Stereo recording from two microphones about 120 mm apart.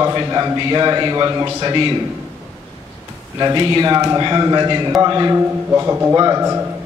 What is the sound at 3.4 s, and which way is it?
A man's voice, 35° right (ahead or behind).